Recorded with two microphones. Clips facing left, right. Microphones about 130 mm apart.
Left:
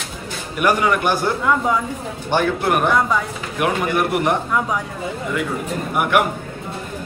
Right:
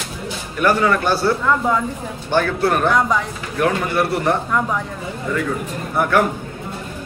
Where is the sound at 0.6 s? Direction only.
15° left (ahead or behind).